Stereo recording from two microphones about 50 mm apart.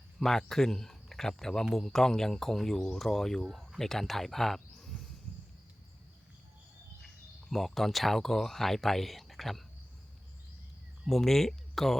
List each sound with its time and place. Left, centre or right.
0.2 s a man's voice: centre
7.0 s speech: centre
11.0 s speech: centre